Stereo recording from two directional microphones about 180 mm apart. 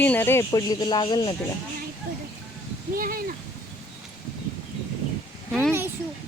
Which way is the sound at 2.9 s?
55° right (ahead or behind).